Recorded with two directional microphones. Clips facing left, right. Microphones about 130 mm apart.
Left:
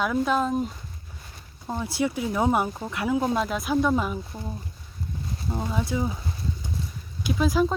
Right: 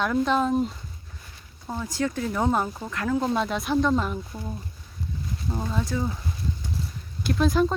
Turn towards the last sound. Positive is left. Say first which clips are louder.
# right 1 dB
turn(degrees=5)  # may be behind; listen again after turning